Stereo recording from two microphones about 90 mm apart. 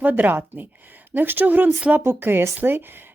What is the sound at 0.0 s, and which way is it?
Speech, 20° right (ahead or behind).